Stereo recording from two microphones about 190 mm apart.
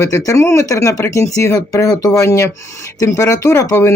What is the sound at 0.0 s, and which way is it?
Speech, 15° left (ahead or behind).